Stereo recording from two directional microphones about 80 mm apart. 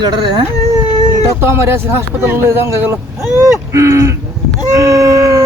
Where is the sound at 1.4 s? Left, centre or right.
Right.